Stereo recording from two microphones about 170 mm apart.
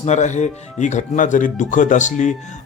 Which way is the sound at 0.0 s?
45° left (ahead or behind).